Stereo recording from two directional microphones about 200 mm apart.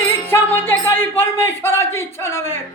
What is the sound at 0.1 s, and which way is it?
Speech, 10° left (ahead or behind).